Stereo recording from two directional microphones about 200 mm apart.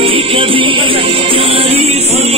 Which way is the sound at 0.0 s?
30° right (ahead or behind).